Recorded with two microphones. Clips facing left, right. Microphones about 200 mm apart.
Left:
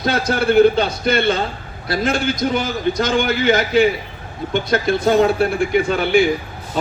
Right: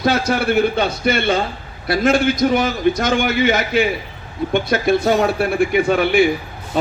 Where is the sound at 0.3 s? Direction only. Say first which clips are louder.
Left 4 dB; 60° right (ahead or behind).